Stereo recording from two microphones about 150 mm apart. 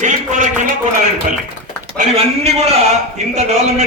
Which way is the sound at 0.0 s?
55° right (ahead or behind).